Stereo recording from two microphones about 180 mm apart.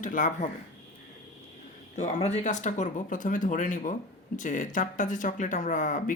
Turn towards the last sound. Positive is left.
turn(degrees=45)  # may be behind; listen again after turning